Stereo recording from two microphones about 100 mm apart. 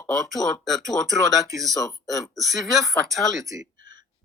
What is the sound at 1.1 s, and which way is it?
Speech, 35° right (ahead or behind).